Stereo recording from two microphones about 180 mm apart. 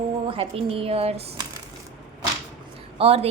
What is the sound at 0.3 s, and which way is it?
Speech, 30° right (ahead or behind).